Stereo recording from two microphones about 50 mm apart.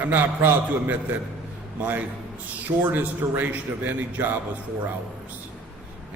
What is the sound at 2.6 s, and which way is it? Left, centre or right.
Speech, right.